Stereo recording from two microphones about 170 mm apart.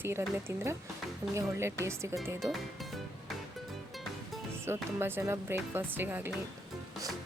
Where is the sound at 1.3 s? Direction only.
15° right (ahead or behind).